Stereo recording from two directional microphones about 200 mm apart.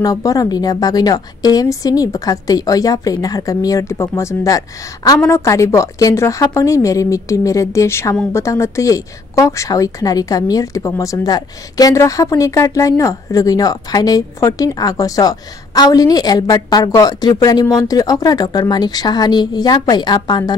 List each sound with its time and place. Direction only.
0.0 s a woman's voice: 15° left (ahead or behind)